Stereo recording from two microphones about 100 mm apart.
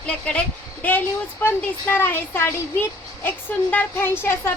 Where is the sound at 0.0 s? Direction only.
10° left (ahead or behind).